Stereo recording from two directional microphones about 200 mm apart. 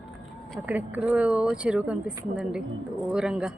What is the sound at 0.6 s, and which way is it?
Speech, 10° right (ahead or behind).